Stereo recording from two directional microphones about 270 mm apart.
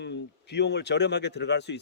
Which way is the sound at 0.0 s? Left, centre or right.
Left.